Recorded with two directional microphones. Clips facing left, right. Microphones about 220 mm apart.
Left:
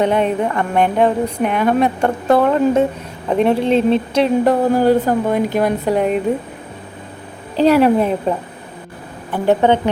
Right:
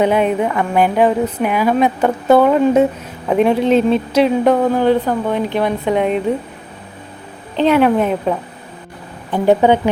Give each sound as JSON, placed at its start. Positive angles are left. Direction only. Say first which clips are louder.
{"t": 0.0, "sound": "speech", "louder": "right 1 dB", "side_deg": -5}
{"t": 7.7, "sound": "speech", "louder": "even", "side_deg": 0}
{"t": 9.3, "sound": "speech", "louder": "right 2 dB", "side_deg": -15}